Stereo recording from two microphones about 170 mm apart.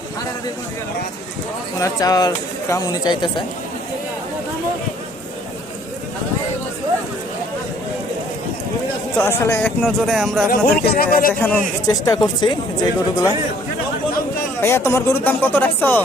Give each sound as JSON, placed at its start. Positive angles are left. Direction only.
{"t": 1.8, "sound": "speech", "side_deg": 20}
{"t": 9.1, "sound": "speech", "side_deg": 15}
{"t": 9.6, "sound": "speech", "side_deg": 5}
{"t": 10.5, "sound": "speech", "side_deg": 60}
{"t": 11.9, "sound": "speech", "side_deg": 25}
{"t": 14.6, "sound": "speech", "side_deg": 15}